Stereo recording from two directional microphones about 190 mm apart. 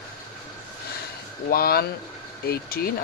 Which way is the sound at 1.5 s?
55° left (ahead or behind).